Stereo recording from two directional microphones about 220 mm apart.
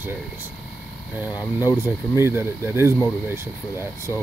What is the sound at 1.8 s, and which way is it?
Speech, 10° right (ahead or behind).